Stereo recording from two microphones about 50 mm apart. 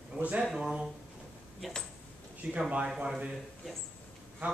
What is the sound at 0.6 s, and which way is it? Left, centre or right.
Speech, centre.